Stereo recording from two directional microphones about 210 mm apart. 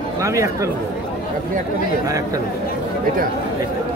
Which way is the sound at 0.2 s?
15° right (ahead or behind).